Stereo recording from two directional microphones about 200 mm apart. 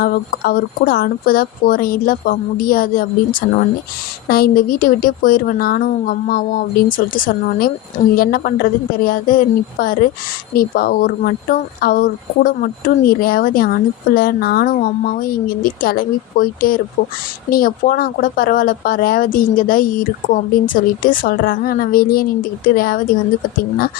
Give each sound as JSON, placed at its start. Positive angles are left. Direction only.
{"t": 0.0, "sound": "speech", "side_deg": 45}
{"t": 4.3, "sound": "speech", "side_deg": 50}